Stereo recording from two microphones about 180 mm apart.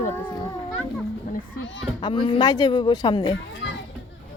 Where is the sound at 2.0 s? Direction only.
25° left (ahead or behind).